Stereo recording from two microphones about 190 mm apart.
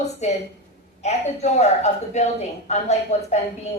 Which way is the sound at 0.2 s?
35° left (ahead or behind).